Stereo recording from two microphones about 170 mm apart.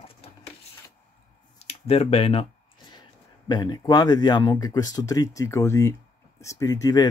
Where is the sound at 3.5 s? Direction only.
25° left (ahead or behind).